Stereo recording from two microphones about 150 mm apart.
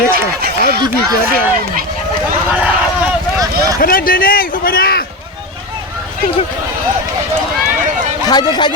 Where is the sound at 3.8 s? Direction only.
75° left (ahead or behind).